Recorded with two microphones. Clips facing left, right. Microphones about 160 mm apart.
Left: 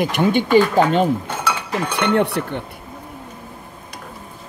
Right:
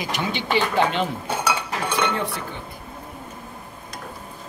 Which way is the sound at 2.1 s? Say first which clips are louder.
Left 9 dB; 65° left (ahead or behind).